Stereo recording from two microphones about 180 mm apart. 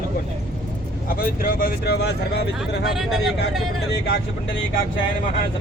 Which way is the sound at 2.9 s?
Centre (ahead or behind).